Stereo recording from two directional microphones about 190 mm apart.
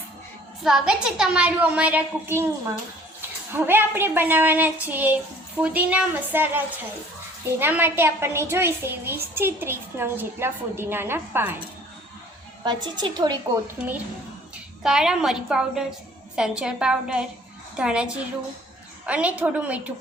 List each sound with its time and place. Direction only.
0.6 s a woman's voice: 5° right (ahead or behind)
7.6 s a woman's voice: 10° right (ahead or behind)
12.6 s a woman's voice: 25° right (ahead or behind)
14.8 s a woman's voice: 5° right (ahead or behind)